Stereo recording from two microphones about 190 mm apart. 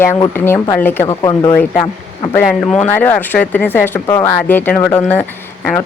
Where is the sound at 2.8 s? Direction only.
10° left (ahead or behind).